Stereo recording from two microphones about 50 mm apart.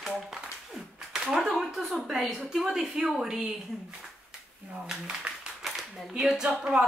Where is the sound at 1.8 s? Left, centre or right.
Centre.